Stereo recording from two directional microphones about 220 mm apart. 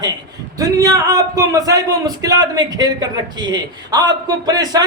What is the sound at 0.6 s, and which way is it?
A man's voice, 15° right (ahead or behind).